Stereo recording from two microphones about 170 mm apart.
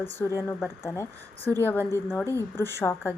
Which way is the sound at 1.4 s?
10° left (ahead or behind).